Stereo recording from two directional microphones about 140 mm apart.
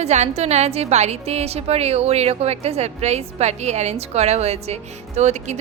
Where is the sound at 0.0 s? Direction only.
50° right (ahead or behind).